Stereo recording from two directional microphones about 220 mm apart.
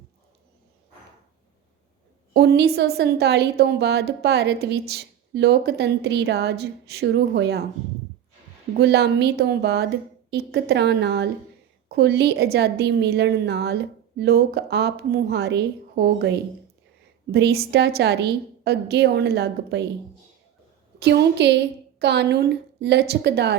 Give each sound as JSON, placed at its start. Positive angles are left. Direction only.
{"t": 2.3, "sound": "a woman's voice", "side_deg": -50}
{"t": 8.8, "sound": "a woman's voice", "side_deg": -50}
{"t": 21.0, "sound": "a woman's voice", "side_deg": -50}